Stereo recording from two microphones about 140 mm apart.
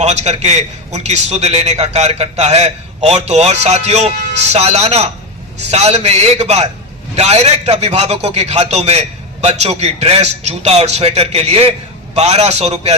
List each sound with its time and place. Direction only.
0.0 s a man's voice: 50° right (ahead or behind)